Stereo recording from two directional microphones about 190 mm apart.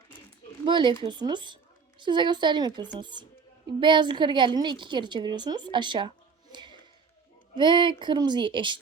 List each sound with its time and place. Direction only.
0.6 s a woman's voice: 25° right (ahead or behind)
6.5 s music: 25° right (ahead or behind)
7.5 s a woman's voice: 25° right (ahead or behind)